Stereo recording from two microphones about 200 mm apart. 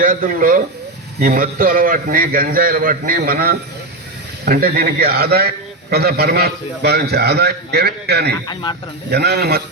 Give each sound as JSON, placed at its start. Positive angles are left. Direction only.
{"t": 0.0, "sound": "a man's voice", "side_deg": -45}
{"t": 8.6, "sound": "speech", "side_deg": 25}
{"t": 9.0, "sound": "a man's voice", "side_deg": -55}